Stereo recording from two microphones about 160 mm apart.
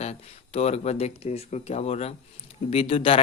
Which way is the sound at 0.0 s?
45° left (ahead or behind).